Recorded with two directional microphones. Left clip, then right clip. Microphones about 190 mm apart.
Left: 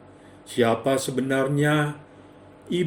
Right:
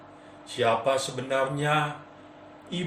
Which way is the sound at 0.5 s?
60° left (ahead or behind).